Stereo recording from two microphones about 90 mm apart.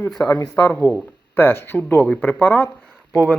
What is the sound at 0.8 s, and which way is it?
Speech, 30° left (ahead or behind).